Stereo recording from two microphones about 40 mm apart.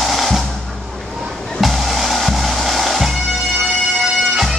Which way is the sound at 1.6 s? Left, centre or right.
Centre.